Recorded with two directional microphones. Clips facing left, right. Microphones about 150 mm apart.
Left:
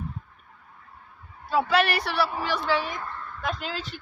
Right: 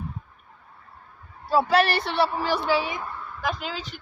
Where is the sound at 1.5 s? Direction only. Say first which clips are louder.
Right 2 dB; 35° right (ahead or behind).